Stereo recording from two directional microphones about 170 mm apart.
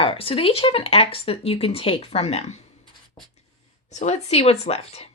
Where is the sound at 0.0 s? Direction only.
30° left (ahead or behind).